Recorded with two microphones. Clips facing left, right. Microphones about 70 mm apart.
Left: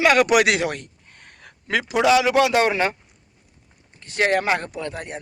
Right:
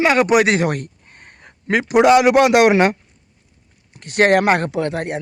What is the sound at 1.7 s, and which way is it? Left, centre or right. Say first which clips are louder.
A man's voice: right 6 dB; right.